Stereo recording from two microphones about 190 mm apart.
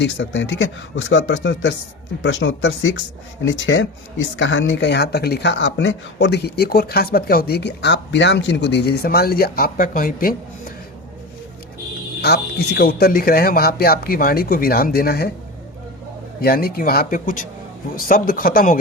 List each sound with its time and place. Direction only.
0.0 s speech: 70° left (ahead or behind); by 10.3 s 50° left (ahead or behind)
12.2 s speech: 60° left (ahead or behind)
16.4 s speech: 50° left (ahead or behind)